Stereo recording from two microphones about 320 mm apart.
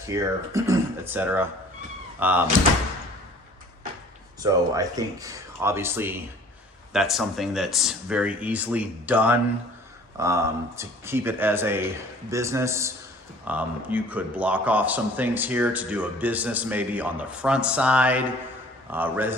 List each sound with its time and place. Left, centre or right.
0.0 s speech: centre
4.4 s a man's voice: centre